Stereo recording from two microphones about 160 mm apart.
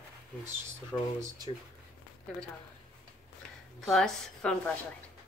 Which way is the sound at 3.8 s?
Centre (ahead or behind).